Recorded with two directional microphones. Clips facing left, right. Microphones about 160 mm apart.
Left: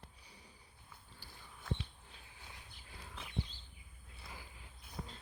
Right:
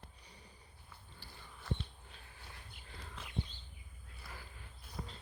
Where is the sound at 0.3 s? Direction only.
10° left (ahead or behind).